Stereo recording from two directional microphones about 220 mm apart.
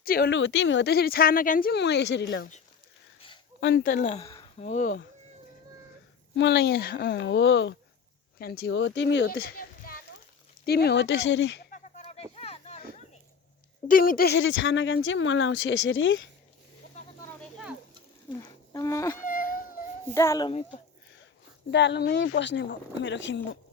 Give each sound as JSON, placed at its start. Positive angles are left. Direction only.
{"t": 0.0, "sound": "speech", "side_deg": 45}
{"t": 3.6, "sound": "speech", "side_deg": 50}
{"t": 6.3, "sound": "speech", "side_deg": 50}
{"t": 11.7, "sound": "a sound", "side_deg": 30}
{"t": 13.8, "sound": "speech", "side_deg": 40}
{"t": 18.3, "sound": "speech", "side_deg": 15}
{"t": 19.2, "sound": "a sound", "side_deg": 40}
{"t": 20.1, "sound": "a child's voice", "side_deg": 15}
{"t": 20.5, "sound": "speech", "side_deg": 30}
{"t": 21.7, "sound": "speech", "side_deg": 55}